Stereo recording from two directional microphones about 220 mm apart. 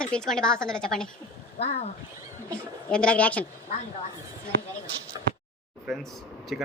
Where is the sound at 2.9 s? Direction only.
5° left (ahead or behind).